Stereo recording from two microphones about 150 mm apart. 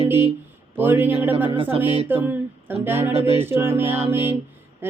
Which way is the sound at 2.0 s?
15° right (ahead or behind).